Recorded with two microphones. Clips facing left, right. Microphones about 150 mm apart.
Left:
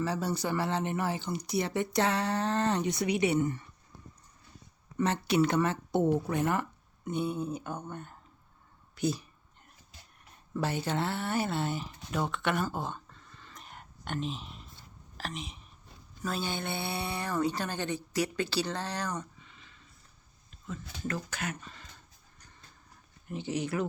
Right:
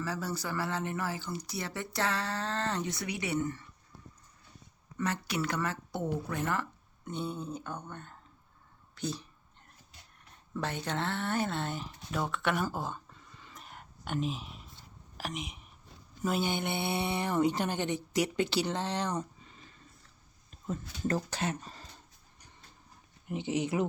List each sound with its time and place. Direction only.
0.0 s speech: 20° left (ahead or behind)
4.9 s speech: 25° left (ahead or behind)
10.5 s speech: 5° left (ahead or behind); by 19.2 s 25° right (ahead or behind)
19.4 s a sound: 40° right (ahead or behind)
20.7 s speech: 35° right (ahead or behind)
23.3 s speech: 20° right (ahead or behind)